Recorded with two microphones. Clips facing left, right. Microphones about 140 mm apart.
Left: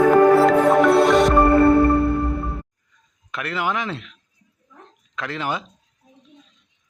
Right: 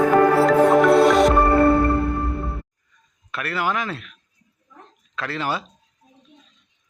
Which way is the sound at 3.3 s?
15° left (ahead or behind).